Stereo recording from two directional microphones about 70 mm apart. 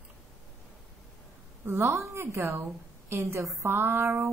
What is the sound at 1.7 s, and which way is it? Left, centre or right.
A woman's voice, right.